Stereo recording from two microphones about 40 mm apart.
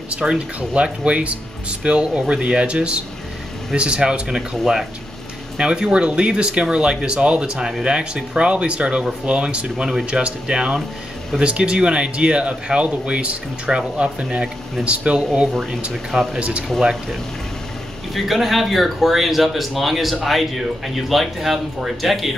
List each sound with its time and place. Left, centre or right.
0.2 s speech: centre
0.8 s speech: right
14.8 s speech: centre
16.3 s speech: right
18.1 s speech: centre